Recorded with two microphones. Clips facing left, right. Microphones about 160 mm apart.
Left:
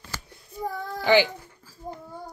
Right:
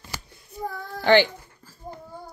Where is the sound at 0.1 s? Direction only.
15° right (ahead or behind).